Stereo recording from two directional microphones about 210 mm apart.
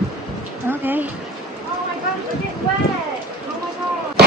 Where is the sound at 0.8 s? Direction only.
10° right (ahead or behind).